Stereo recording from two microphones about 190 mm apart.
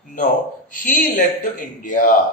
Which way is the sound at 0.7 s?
45° left (ahead or behind).